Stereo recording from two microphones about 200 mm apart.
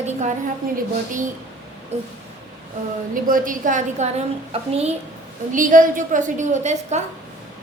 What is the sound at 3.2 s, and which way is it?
A woman's voice, 45° right (ahead or behind).